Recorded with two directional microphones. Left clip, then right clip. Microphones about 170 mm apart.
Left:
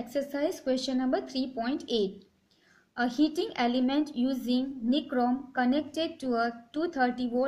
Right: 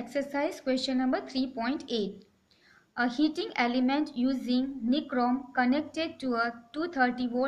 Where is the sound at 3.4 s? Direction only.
55° left (ahead or behind).